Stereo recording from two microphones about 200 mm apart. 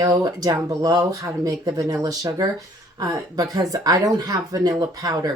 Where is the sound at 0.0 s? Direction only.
15° right (ahead or behind).